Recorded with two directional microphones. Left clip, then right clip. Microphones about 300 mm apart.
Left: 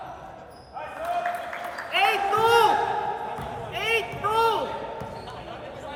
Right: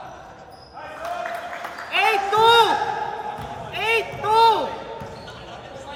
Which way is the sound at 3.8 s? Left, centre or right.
Right.